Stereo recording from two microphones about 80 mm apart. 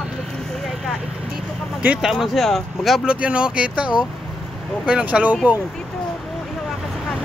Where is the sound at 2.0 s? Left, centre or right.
Centre.